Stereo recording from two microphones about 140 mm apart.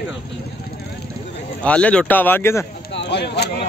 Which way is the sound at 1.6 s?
10° left (ahead or behind).